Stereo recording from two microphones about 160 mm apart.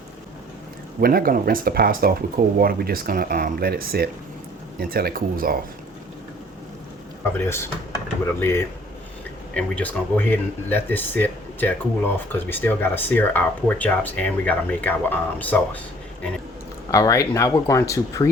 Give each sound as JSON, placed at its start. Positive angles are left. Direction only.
{"t": 1.0, "sound": "speech", "side_deg": -65}
{"t": 7.4, "sound": "speech", "side_deg": 15}
{"t": 16.9, "sound": "speech", "side_deg": 20}